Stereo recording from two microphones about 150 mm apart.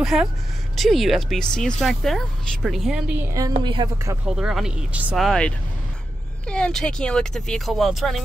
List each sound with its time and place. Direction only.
0.0 s speech: centre (ahead or behind)
3.6 s speech: 30° right (ahead or behind)
4.4 s speech: 5° right (ahead or behind)
6.5 s speech: 5° left (ahead or behind)